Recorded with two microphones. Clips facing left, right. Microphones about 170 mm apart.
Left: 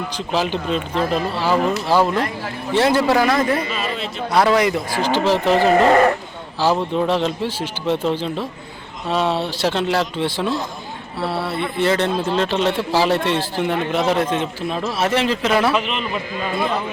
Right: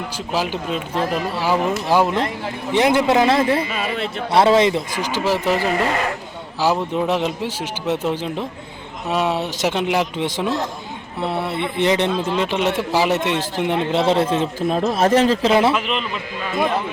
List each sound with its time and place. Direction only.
0.3 s speech: 10° right (ahead or behind); by 4.8 s 25° right (ahead or behind)
5.0 s speech: 10° right (ahead or behind)
5.5 s speech: 50° left (ahead or behind)
6.6 s speech: 10° right (ahead or behind); by 15.7 s 25° right (ahead or behind)
15.7 s a man's voice: centre (ahead or behind)